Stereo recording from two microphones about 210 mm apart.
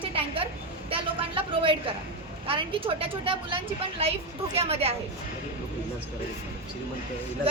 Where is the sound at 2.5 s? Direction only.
25° right (ahead or behind).